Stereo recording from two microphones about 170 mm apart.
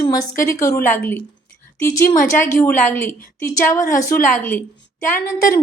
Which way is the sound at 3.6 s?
15° left (ahead or behind).